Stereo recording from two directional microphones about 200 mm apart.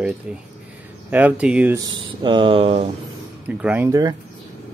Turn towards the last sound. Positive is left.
turn(degrees=-20)  # may be behind; listen again after turning